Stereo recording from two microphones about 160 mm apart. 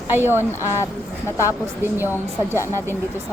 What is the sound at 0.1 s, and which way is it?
Speech, 15° right (ahead or behind).